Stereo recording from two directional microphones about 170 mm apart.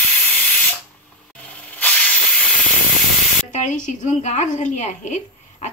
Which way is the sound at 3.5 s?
45° left (ahead or behind).